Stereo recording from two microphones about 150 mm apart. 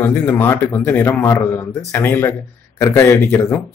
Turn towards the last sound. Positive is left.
turn(degrees=20)  # may be behind; listen again after turning